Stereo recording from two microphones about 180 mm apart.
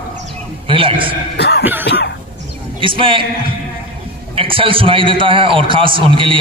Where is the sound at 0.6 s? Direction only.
30° right (ahead or behind).